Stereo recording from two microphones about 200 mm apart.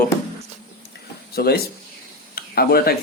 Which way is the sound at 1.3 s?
50° left (ahead or behind).